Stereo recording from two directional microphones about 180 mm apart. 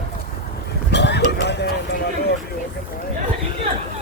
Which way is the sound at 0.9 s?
70° left (ahead or behind).